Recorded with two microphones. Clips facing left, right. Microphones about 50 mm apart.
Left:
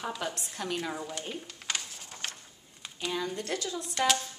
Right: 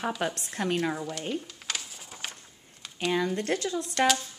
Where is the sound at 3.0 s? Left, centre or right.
Right.